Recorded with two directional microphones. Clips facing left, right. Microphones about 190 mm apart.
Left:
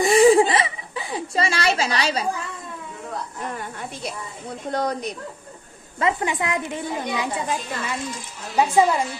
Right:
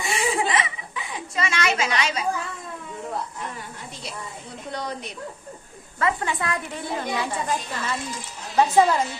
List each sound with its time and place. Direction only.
0.0 s chuckle: 40° left (ahead or behind)
3.5 s a woman's voice: 55° left (ahead or behind)
4.7 s speech: 45° left (ahead or behind)
5.9 s a woman's voice: 20° left (ahead or behind)